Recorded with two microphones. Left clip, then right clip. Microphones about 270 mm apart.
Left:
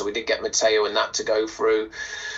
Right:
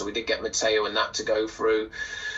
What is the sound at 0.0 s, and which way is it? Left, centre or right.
Speech, centre.